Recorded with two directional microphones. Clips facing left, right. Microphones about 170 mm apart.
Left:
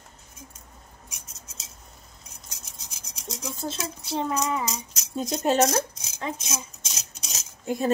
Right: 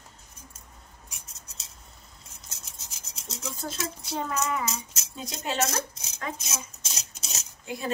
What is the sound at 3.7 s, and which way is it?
Speech, 25° left (ahead or behind).